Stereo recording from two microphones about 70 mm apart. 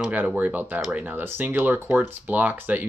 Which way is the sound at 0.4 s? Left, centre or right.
Right.